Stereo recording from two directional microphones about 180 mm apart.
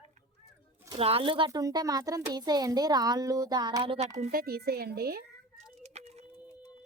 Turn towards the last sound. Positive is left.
turn(degrees=-35)  # may be behind; listen again after turning